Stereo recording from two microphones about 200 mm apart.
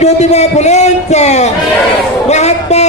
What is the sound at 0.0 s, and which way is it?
A man's voice, 35° left (ahead or behind).